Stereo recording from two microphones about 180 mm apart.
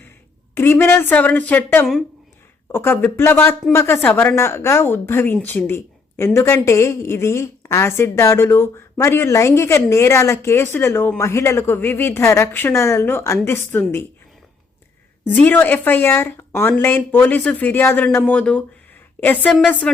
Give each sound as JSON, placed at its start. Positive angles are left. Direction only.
{"t": 0.5, "sound": "speech", "side_deg": 10}
{"t": 15.2, "sound": "speech", "side_deg": 10}